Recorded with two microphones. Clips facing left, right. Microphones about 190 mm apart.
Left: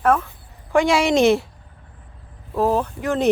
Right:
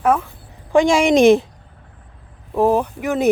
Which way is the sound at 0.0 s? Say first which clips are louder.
Right 1 dB; 10° right (ahead or behind).